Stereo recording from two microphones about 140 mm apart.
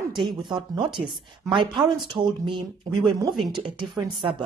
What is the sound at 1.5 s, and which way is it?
Speech, 35° right (ahead or behind).